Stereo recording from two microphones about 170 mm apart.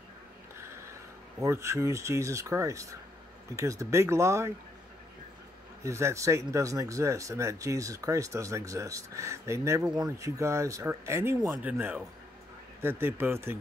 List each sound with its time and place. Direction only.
1.4 s speech: 15° right (ahead or behind)
5.9 s speech: 15° right (ahead or behind)